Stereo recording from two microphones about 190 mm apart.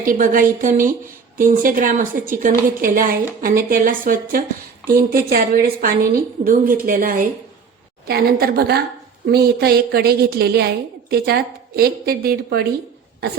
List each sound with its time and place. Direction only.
0.0 s speech: 45° right (ahead or behind)
8.0 s a woman's voice: 55° right (ahead or behind)